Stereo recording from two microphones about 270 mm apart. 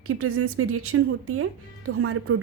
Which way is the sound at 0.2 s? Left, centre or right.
Right.